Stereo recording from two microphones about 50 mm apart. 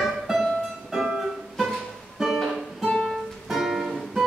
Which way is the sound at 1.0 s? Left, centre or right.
Centre.